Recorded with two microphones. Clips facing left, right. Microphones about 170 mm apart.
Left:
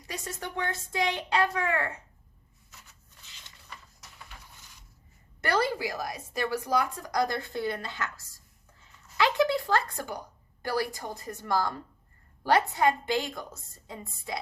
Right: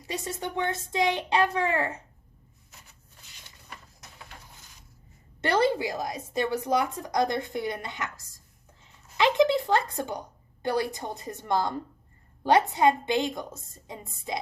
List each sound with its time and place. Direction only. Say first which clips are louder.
0.1 s a woman's voice: right 4 dB; 25° right (ahead or behind)
3.3 s a sound: right 2 dB; 10° right (ahead or behind)
5.4 s a woman's voice: right 4 dB; 20° right (ahead or behind)